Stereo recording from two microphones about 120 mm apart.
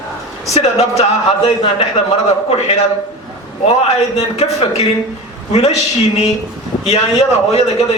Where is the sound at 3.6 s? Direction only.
60° left (ahead or behind).